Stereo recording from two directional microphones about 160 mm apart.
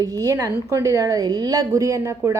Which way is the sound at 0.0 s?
20° right (ahead or behind).